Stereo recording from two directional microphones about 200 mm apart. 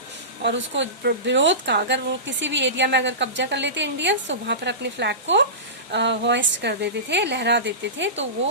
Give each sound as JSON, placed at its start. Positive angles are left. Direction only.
{"t": 0.4, "sound": "speech", "side_deg": -65}